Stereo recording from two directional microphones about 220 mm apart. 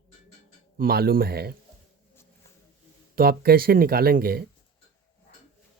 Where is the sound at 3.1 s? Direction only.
45° right (ahead or behind).